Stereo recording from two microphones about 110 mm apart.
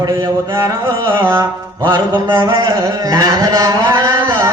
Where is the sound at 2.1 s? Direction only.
25° right (ahead or behind).